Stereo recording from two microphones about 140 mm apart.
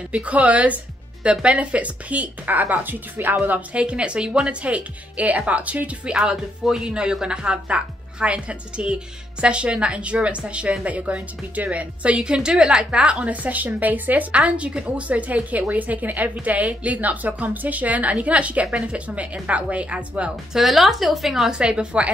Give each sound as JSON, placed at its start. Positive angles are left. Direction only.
{"t": 0.1, "sound": "speech", "side_deg": -10}